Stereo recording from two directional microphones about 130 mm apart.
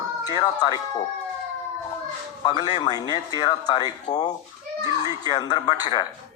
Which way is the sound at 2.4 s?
35° left (ahead or behind).